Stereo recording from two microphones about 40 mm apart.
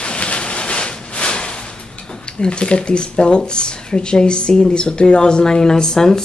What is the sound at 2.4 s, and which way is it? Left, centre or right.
Speech, left.